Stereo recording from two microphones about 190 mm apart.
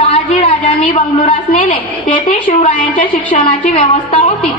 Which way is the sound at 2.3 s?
45° left (ahead or behind).